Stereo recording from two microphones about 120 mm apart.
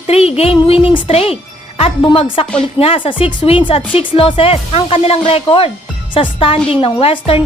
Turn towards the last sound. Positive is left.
turn(degrees=50)  # may be behind; listen again after turning